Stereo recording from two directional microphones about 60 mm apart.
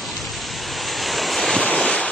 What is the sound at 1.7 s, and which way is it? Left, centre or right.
Vehicle, centre.